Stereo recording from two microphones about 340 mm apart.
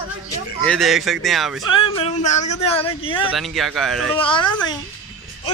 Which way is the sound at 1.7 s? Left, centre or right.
Centre.